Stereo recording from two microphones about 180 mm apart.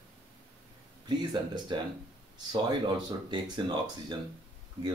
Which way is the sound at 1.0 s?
25° right (ahead or behind).